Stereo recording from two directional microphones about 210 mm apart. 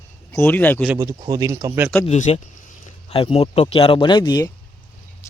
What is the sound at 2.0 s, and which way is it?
Speech, 30° left (ahead or behind).